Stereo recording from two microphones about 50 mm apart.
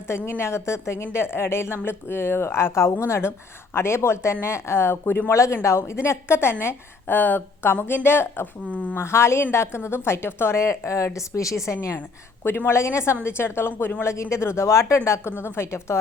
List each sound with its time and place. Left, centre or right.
0.3 s speech: left
1.1 s speech: left
5.3 s speech: left
5.6 s speech: left
7.1 s speech: left
8.7 s speech: left
9.0 s speech: left
10.6 s speech: left
12.5 s speech: left
12.7 s a woman's voice: left
14.0 s a woman's voice: left